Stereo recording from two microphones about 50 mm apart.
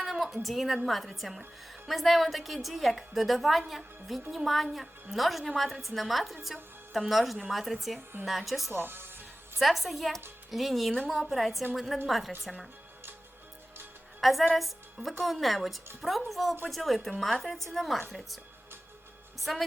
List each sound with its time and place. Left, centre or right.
0.0 s a sound: centre
0.4 s a woman's voice: centre
8.7 s music: right
9.6 s a woman's voice: centre
14.2 s a woman's voice: centre
19.5 s a woman's voice: centre